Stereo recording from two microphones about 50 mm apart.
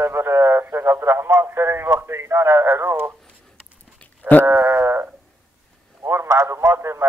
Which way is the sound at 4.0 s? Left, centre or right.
Left.